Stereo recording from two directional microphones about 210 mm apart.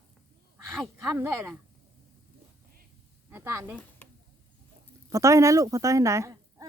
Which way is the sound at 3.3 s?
10° right (ahead or behind).